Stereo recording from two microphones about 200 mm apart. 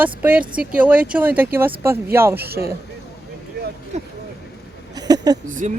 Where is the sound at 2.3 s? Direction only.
50° right (ahead or behind).